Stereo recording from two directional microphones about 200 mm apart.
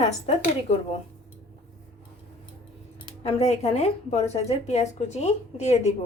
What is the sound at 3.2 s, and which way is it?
A woman's voice, 30° left (ahead or behind).